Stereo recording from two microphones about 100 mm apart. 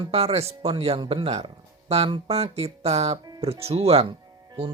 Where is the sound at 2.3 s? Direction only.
90° right.